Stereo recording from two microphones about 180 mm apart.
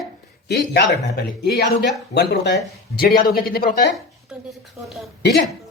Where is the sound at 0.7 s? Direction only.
65° left (ahead or behind).